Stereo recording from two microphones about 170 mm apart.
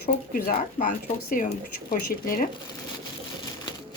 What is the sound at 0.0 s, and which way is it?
Speech, 60° left (ahead or behind).